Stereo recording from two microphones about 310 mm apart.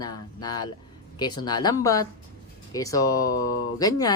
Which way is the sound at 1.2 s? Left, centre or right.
Centre.